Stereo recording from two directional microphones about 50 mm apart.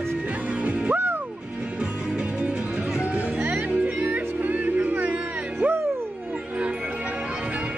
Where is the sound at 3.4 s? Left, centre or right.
Right.